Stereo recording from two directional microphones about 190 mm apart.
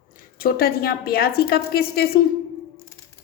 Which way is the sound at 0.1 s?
50° left (ahead or behind).